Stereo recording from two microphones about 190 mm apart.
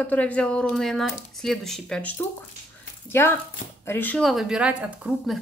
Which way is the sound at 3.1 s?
15° left (ahead or behind).